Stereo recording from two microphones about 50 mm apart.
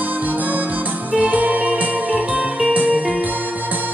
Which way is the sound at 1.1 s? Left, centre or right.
Right.